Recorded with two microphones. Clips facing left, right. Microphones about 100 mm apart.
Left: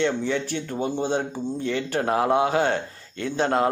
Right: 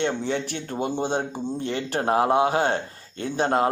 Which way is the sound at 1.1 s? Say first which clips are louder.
Left 1 dB; 55° right (ahead or behind).